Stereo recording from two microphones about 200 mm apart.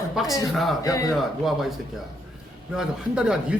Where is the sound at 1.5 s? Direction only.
Centre (ahead or behind).